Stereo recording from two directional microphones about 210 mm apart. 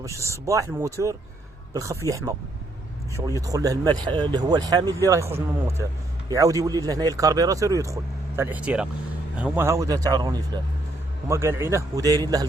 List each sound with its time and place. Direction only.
0.0 s speech: 15° right (ahead or behind)